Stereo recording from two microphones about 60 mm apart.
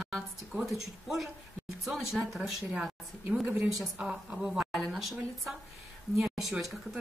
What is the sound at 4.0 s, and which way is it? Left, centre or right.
Speech, right.